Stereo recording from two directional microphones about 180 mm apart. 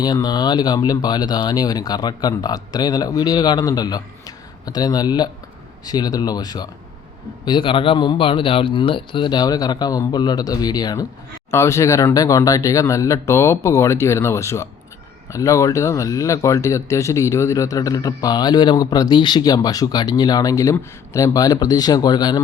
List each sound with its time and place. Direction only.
0.0 s speech: 20° left (ahead or behind)